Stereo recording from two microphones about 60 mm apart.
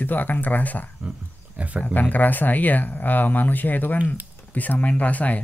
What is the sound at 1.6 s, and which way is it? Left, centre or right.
Speech, right.